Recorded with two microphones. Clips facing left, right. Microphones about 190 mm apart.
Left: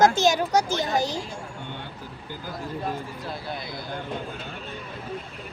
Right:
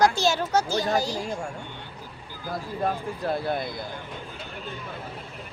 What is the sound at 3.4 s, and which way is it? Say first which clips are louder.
Speech: right 7 dB; 55° right (ahead or behind).